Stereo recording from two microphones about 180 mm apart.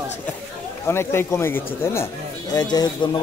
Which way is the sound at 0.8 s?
15° left (ahead or behind).